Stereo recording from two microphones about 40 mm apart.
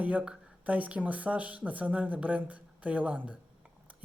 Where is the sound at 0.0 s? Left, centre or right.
Right.